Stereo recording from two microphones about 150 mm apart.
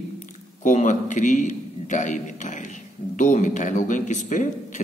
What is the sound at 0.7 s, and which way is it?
A man's voice, 55° left (ahead or behind).